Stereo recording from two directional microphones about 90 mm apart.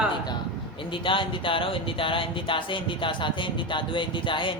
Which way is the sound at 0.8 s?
70° left (ahead or behind).